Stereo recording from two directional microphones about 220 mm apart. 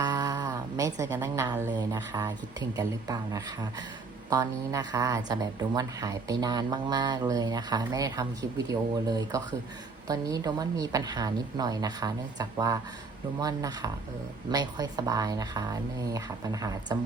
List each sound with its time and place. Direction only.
0.0 s a woman's voice: 15° right (ahead or behind)